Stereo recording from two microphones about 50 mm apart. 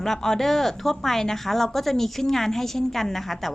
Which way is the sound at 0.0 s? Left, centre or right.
Centre.